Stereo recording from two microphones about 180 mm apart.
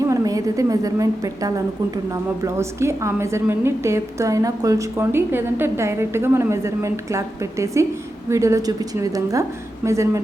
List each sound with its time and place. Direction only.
0.0 s a woman's voice: 20° right (ahead or behind)